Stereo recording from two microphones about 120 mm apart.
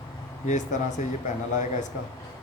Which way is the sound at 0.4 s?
90° left.